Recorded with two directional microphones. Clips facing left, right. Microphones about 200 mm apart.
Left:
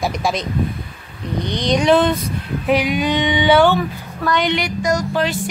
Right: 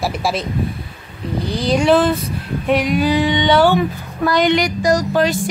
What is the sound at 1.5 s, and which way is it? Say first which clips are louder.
Speech: right 1 dB; 5° right (ahead or behind).